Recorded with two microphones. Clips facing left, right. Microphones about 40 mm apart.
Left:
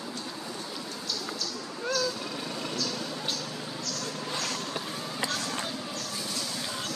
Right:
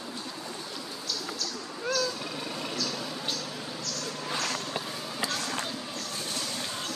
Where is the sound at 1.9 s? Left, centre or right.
Centre.